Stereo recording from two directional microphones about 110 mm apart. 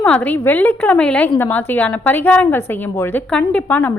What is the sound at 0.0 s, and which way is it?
A woman's voice, 15° left (ahead or behind).